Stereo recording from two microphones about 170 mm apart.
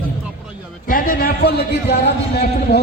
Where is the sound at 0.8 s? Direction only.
60° left (ahead or behind); by 2.8 s 75° left (ahead or behind).